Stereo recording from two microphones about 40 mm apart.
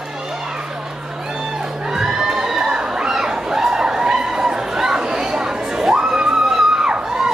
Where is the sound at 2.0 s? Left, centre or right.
Centre.